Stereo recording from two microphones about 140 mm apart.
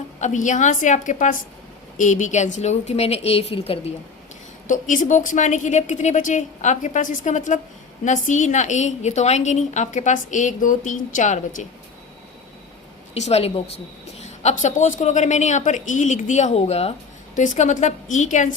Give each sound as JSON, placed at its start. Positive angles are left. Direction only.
{"t": 0.2, "sound": "a woman's voice", "side_deg": 60}
{"t": 4.7, "sound": "a woman's voice", "side_deg": 65}
{"t": 13.1, "sound": "a woman's voice", "side_deg": 50}
{"t": 17.3, "sound": "a woman's voice", "side_deg": 60}